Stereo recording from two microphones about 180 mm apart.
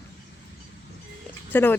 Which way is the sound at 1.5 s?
10° left (ahead or behind).